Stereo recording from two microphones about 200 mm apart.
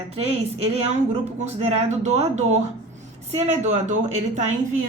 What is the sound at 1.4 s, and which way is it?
A woman's voice, 35° right (ahead or behind).